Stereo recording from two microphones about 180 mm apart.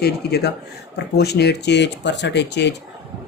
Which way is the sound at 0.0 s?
65° left (ahead or behind).